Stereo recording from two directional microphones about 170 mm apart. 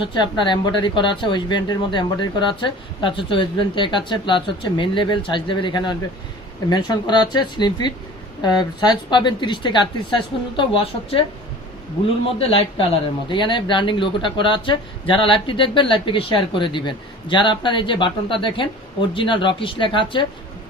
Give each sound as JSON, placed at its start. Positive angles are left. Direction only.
{"t": 0.1, "sound": "a woman's voice", "side_deg": 25}
{"t": 12.4, "sound": "speech", "side_deg": 35}